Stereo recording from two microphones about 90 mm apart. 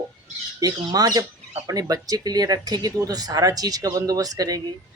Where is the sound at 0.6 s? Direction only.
45° right (ahead or behind).